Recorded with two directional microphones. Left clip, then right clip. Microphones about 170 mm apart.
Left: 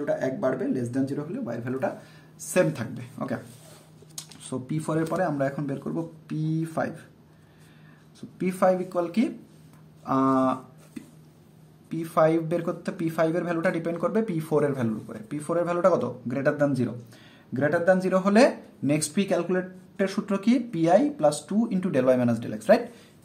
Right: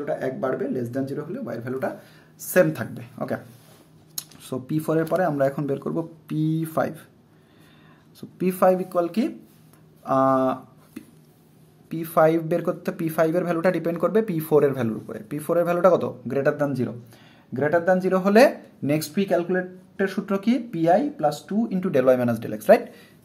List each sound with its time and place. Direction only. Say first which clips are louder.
0.0 s speech: even; 20° right (ahead or behind); by 6.9 s 40° right (ahead or behind)
8.2 s speech: right 4 dB; 30° right (ahead or behind)
11.9 s speech: right 3 dB; 35° right (ahead or behind); by 18.3 s 20° right (ahead or behind)
18.3 s speech: right 5 dB; 35° right (ahead or behind)
18.9 s speech: right 4 dB; 20° right (ahead or behind)
21.9 s speech: right 3 dB; 30° right (ahead or behind)